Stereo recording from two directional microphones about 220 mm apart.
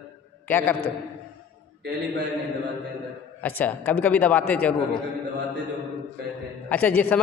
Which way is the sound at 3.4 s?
5° left (ahead or behind).